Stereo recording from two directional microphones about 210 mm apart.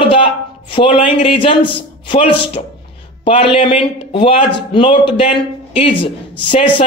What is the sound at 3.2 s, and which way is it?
A man's voice, 25° left (ahead or behind).